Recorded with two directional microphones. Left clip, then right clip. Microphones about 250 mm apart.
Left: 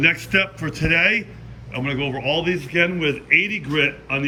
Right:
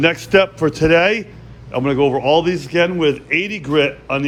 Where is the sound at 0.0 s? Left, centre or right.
Centre.